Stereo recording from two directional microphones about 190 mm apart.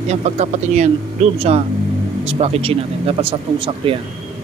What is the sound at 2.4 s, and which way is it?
Speech, 30° right (ahead or behind).